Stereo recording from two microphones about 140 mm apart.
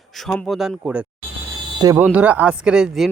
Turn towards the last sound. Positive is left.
turn(degrees=-5)  # may be behind; listen again after turning